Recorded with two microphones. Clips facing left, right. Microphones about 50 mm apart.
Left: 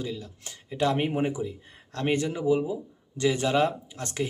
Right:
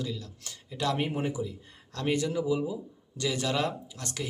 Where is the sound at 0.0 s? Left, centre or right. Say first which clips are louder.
Left 2 dB; left.